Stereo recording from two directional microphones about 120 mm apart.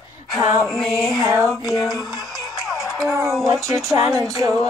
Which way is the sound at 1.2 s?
25° right (ahead or behind).